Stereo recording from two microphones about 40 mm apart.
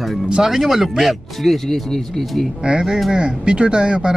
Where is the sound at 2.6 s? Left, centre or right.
Right.